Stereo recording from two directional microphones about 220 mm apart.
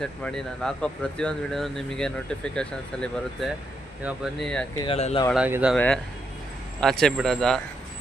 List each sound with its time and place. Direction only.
0.0 s speech: 5° left (ahead or behind)
4.8 s speech: 25° left (ahead or behind)
5.3 s speech: 5° right (ahead or behind)